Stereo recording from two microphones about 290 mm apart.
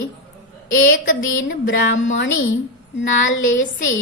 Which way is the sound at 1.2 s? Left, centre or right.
Left.